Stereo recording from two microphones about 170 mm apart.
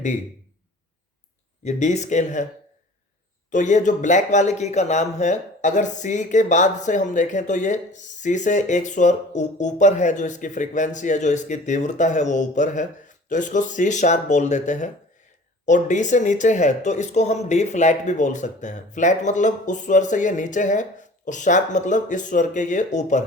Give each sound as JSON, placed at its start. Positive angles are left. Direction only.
{"t": 1.6, "sound": "speech", "side_deg": 40}
{"t": 3.5, "sound": "speech", "side_deg": 45}